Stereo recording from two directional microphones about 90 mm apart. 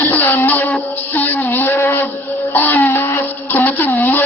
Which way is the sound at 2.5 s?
20° left (ahead or behind).